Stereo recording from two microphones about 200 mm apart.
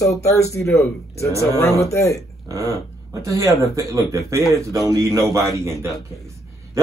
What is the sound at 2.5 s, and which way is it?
A man's voice, 15° right (ahead or behind).